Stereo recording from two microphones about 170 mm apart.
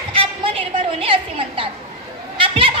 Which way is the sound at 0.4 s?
35° right (ahead or behind).